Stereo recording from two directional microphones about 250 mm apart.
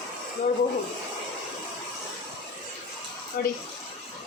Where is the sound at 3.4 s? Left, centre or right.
Left.